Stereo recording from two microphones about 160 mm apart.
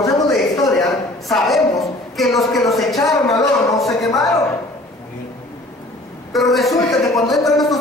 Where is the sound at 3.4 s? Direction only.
20° left (ahead or behind).